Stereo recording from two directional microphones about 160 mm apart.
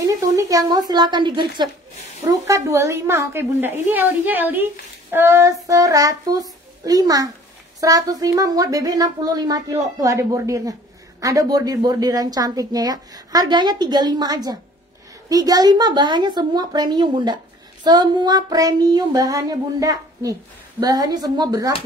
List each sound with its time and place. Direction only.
0.0 s a woman's voice: 20° right (ahead or behind)